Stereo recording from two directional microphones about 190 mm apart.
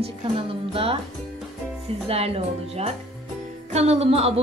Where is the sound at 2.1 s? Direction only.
30° right (ahead or behind).